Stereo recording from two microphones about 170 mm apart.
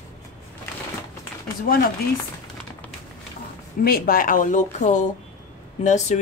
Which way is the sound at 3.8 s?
60° left (ahead or behind).